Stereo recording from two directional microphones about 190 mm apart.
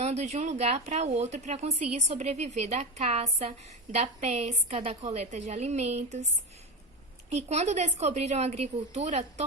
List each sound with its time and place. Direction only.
0.0 s speech: 35° right (ahead or behind)
7.3 s speech: 35° right (ahead or behind)